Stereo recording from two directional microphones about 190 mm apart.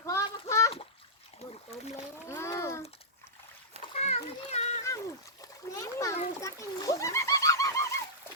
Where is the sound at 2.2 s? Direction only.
15° left (ahead or behind).